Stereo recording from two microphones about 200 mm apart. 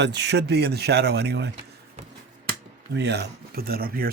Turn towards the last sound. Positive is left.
turn(degrees=-50)  # may be behind; listen again after turning